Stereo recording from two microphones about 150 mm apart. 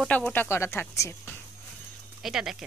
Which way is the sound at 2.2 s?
Centre (ahead or behind).